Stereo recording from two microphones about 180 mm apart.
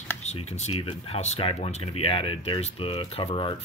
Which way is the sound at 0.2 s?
35° left (ahead or behind).